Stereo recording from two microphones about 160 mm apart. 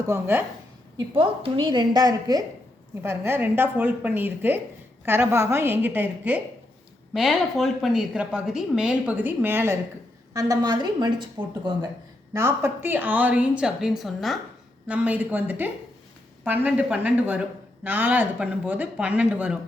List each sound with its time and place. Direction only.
0.1 s a woman's voice: 15° right (ahead or behind)
0.9 s a woman's voice: 35° right (ahead or behind); by 9.7 s 15° right (ahead or behind)
10.3 s a woman's voice: 25° right (ahead or behind)
12.3 s a woman's voice: 15° right (ahead or behind)